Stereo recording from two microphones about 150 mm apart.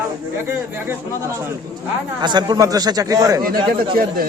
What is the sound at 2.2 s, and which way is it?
Speech, 30° right (ahead or behind).